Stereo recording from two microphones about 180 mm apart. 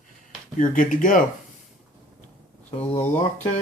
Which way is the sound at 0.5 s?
45° left (ahead or behind).